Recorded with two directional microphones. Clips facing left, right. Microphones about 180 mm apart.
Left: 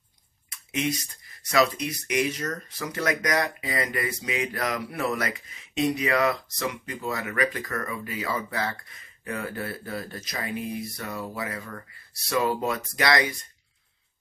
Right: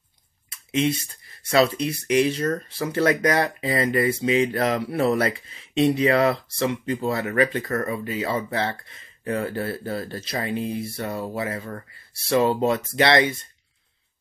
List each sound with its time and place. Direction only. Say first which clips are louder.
0.5 s speech: right 5 dB; 30° right (ahead or behind)